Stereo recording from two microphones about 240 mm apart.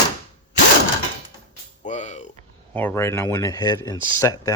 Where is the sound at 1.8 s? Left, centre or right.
Left.